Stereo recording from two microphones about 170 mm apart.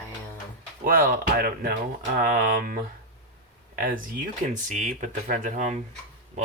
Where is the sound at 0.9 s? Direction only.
55° right (ahead or behind).